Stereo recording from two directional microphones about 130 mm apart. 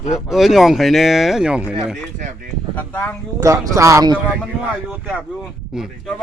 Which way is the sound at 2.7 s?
10° left (ahead or behind).